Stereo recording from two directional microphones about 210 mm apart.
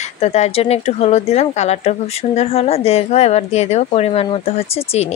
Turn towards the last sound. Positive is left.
turn(degrees=30)  # may be behind; listen again after turning